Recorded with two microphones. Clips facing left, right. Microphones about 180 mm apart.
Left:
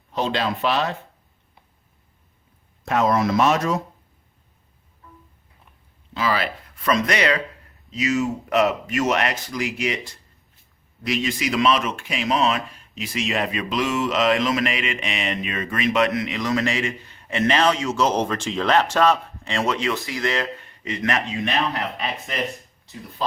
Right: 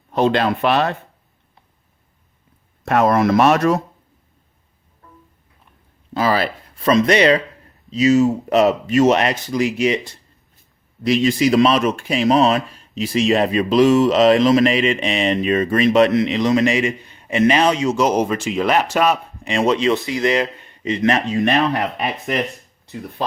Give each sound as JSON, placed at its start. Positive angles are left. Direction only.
{"t": 0.1, "sound": "speech", "side_deg": -55}
{"t": 2.8, "sound": "speech", "side_deg": -60}
{"t": 6.1, "sound": "speech", "side_deg": -35}
{"t": 11.0, "sound": "speech", "side_deg": -35}
{"t": 21.2, "sound": "speech", "side_deg": -45}